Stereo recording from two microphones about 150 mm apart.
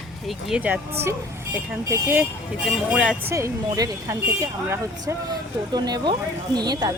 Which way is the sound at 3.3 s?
20° right (ahead or behind).